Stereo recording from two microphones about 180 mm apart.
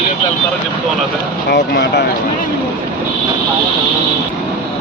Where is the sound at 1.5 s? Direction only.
65° left (ahead or behind).